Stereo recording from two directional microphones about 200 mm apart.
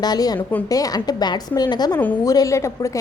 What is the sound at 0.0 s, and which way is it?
A woman's voice, 20° left (ahead or behind).